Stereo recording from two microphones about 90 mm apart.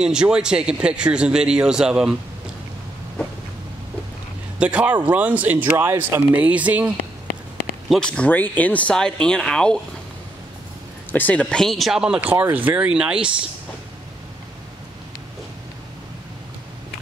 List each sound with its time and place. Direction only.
0.0 s speech: 10° right (ahead or behind)
4.6 s speech: 15° right (ahead or behind)
7.9 s speech: 10° left (ahead or behind)
11.1 s speech: 20° left (ahead or behind)
11.6 s speech: centre (ahead or behind)